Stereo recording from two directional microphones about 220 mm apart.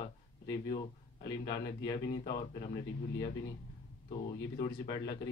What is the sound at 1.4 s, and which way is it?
Speech, 20° left (ahead or behind).